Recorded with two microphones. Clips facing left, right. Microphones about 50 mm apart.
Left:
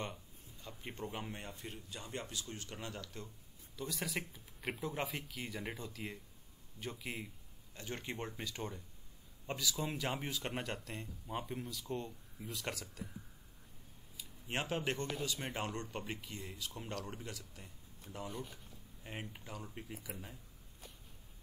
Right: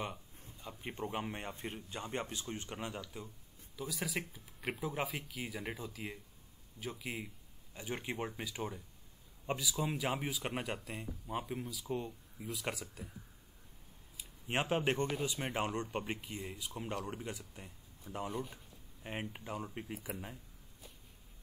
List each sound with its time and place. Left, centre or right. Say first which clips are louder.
0.0 s a sound: right 2 dB; centre
1.0 s speech: right 5 dB; right; by 3.3 s centre
3.7 s speech: right 1 dB; centre
7.7 s speech: right 3 dB; centre
14.1 s speech: right 4 dB; right
19.9 s speech: right 4 dB; right